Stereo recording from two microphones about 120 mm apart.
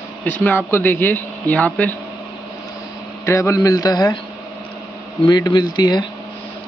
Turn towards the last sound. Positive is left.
turn(degrees=35)  # may be behind; listen again after turning